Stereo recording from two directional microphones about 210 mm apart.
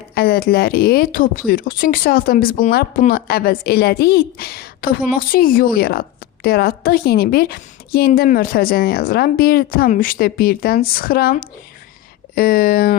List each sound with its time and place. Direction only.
0.1 s speech: 50° left (ahead or behind)